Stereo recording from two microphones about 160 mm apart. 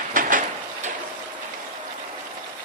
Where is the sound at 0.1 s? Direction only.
55° right (ahead or behind).